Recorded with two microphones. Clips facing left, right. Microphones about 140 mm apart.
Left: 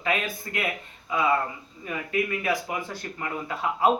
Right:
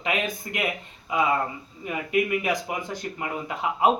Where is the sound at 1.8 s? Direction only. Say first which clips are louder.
Right 3 dB; 20° right (ahead or behind).